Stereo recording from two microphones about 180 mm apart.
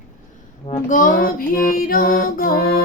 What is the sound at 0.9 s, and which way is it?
Music, 50° left (ahead or behind).